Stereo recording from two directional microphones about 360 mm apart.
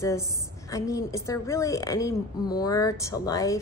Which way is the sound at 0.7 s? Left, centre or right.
Centre.